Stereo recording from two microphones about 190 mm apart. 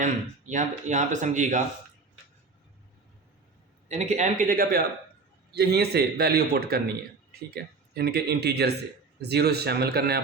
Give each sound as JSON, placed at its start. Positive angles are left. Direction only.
{"t": 0.0, "sound": "speech", "side_deg": -40}
{"t": 3.8, "sound": "a man's voice", "side_deg": -35}